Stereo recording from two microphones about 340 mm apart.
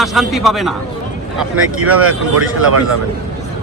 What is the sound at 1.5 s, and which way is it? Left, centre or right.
Speech, right.